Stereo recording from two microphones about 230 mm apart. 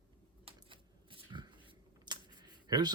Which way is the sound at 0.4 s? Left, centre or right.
Right.